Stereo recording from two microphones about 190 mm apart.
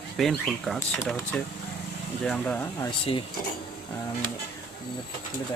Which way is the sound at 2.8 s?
25° left (ahead or behind).